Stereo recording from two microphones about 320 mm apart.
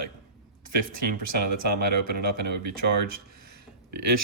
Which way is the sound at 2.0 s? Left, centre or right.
Right.